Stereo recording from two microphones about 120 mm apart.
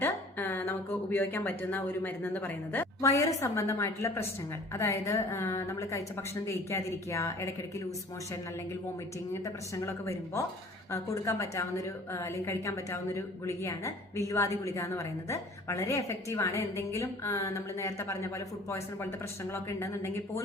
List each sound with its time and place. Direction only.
0.0 s a woman's voice: 15° left (ahead or behind)
9.3 s a woman's voice: 25° left (ahead or behind)